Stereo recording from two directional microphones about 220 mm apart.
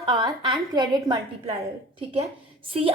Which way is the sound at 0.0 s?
20° right (ahead or behind).